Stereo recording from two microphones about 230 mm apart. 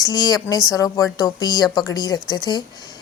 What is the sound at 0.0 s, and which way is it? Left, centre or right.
A woman's voice, centre.